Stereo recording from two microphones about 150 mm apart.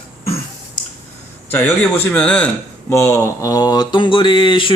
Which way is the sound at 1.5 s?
10° left (ahead or behind).